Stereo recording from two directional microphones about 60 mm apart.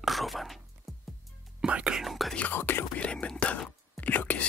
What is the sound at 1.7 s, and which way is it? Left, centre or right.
Whispering, centre.